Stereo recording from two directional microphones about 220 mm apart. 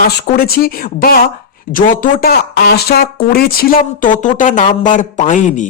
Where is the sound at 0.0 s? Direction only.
45° left (ahead or behind).